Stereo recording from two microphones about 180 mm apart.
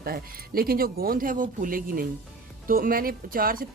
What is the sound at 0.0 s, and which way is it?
Speech, 55° right (ahead or behind).